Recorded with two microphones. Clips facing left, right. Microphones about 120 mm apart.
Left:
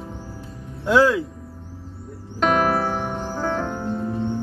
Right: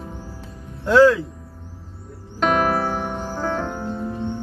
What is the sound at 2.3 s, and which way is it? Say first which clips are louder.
Music: even; centre (ahead or behind).